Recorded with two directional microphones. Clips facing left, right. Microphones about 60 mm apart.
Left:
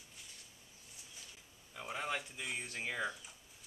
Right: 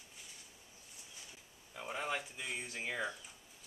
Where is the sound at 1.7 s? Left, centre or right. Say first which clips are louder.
Right 1 dB; centre.